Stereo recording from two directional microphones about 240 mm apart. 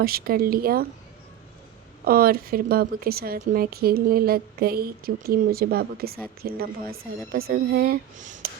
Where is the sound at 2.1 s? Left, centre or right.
Right.